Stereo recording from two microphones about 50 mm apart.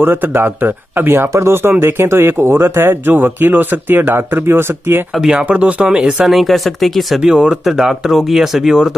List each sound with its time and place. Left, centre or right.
0.0 s speech: right
5.5 s speech: right
5.9 s speech: centre
6.3 s speech: centre
7.2 s speech: centre